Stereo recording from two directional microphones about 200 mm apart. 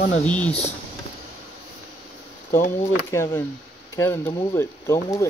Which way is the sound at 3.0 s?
15° left (ahead or behind).